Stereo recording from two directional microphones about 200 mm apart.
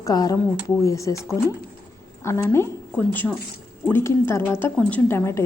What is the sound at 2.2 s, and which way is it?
A woman's voice, 15° left (ahead or behind).